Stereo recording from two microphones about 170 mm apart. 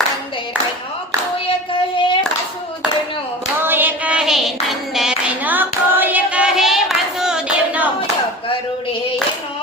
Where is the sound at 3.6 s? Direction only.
10° right (ahead or behind).